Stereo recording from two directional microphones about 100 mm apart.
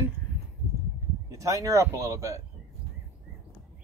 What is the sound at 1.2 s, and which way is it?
Speech, 30° right (ahead or behind).